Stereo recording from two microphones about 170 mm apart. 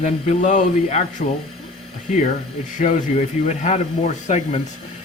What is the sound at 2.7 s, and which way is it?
Speech, 50° left (ahead or behind).